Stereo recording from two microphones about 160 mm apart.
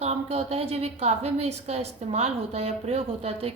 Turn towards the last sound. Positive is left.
turn(degrees=-40)  # may be behind; listen again after turning